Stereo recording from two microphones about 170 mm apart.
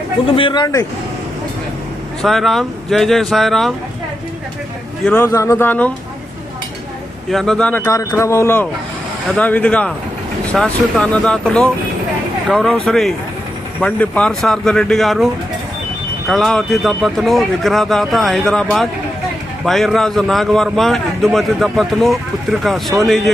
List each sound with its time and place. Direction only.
0.3 s a man's voice: 30° left (ahead or behind)
2.2 s speech: centre (ahead or behind)
5.0 s speech: 10° left (ahead or behind)
7.3 s speech: centre (ahead or behind)
7.9 s speech: 15° left (ahead or behind); by 23.3 s centre (ahead or behind)